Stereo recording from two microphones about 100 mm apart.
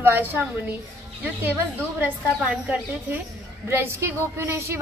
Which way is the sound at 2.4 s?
15° right (ahead or behind).